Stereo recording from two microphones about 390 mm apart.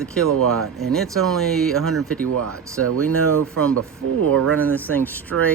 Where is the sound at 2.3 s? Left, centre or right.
Right.